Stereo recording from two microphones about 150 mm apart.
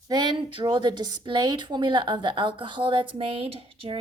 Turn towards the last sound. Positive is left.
turn(degrees=-35)  # may be behind; listen again after turning